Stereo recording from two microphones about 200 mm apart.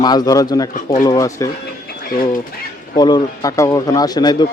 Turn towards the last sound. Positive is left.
turn(degrees=20)  # may be behind; listen again after turning